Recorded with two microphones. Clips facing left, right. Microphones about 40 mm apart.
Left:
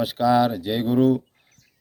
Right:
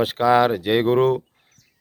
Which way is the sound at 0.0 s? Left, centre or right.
Right.